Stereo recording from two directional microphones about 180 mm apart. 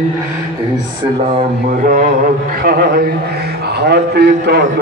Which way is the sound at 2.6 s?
60° right (ahead or behind).